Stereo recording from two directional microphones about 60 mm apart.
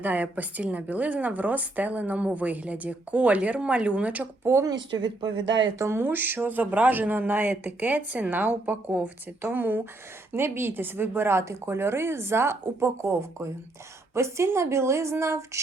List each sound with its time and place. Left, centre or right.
0.0 s a woman's voice: right
5.8 s speech: right
10.3 s speech: right